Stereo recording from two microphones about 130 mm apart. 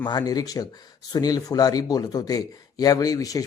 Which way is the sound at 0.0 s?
30° left (ahead or behind).